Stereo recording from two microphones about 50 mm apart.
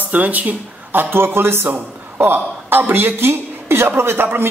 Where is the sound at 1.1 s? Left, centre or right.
Right.